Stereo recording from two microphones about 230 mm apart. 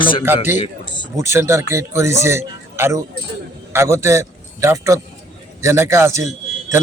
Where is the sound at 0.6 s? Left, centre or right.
Left.